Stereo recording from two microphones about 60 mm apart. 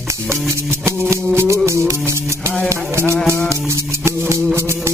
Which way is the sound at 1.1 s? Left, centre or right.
Right.